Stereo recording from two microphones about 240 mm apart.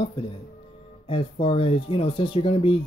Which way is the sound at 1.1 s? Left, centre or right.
Left.